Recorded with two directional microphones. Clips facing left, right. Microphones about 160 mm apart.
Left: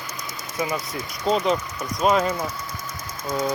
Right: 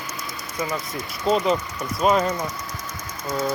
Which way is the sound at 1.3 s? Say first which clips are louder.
Right 1 dB; centre (ahead or behind).